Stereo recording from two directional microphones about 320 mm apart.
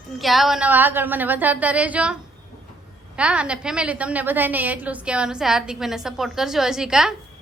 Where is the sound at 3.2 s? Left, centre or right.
Centre.